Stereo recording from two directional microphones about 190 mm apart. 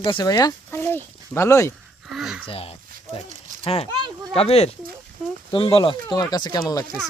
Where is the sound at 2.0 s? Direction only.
Centre (ahead or behind).